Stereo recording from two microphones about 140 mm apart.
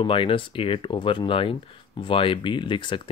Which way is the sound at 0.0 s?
40° left (ahead or behind).